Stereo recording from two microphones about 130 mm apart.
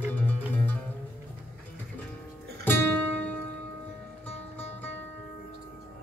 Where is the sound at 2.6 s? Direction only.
15° left (ahead or behind).